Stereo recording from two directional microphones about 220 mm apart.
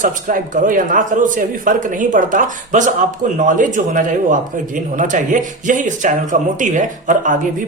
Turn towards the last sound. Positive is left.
turn(degrees=-35)  # may be behind; listen again after turning